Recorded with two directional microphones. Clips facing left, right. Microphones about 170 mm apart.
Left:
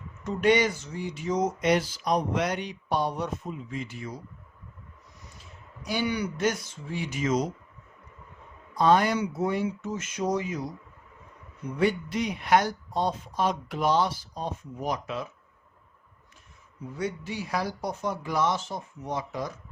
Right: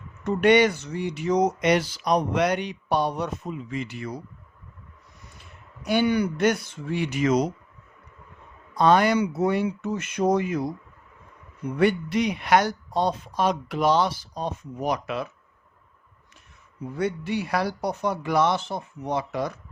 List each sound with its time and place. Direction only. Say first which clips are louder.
0.3 s speech: right 5 dB; 65° right (ahead or behind)
5.4 s speech: right 2 dB; 60° right (ahead or behind)
8.7 s speech: right 3 dB; 75° right (ahead or behind); by 10.7 s 60° right (ahead or behind)
11.8 s speech: right 4 dB; 70° right (ahead or behind)
16.9 s speech: right 6 dB; 65° right (ahead or behind)